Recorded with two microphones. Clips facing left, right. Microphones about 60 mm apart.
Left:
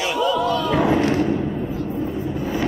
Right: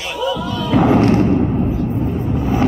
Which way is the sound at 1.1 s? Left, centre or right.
Right.